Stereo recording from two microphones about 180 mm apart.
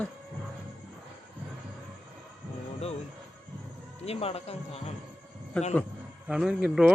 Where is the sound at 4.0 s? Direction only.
35° left (ahead or behind).